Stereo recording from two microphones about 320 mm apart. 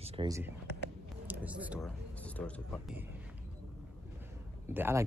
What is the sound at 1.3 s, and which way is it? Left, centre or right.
Speech, centre.